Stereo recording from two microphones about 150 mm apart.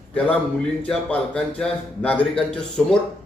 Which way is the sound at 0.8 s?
10° left (ahead or behind).